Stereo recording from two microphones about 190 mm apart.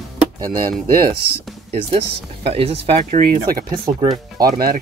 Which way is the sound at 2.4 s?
30° right (ahead or behind).